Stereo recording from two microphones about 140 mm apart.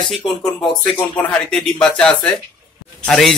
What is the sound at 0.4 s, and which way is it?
A man's voice, 5° left (ahead or behind).